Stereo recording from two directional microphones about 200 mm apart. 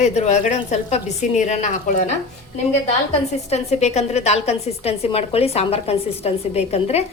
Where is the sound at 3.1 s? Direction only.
30° left (ahead or behind).